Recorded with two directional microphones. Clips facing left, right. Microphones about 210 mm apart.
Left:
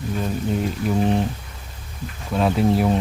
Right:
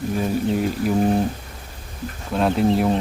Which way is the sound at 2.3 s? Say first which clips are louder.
Even; centre (ahead or behind).